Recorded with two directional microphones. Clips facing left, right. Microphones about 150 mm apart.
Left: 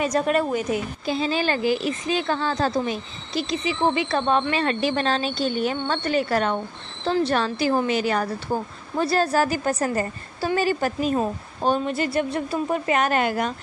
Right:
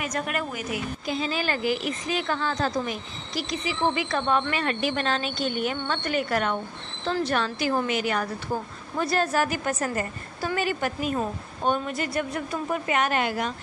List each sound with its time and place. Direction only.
0.0 s a woman's voice: 30° left (ahead or behind); by 13.5 s 45° left (ahead or behind)